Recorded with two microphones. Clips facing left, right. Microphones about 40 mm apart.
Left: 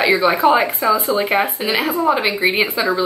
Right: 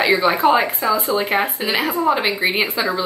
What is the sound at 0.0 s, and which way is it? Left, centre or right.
Speech, centre.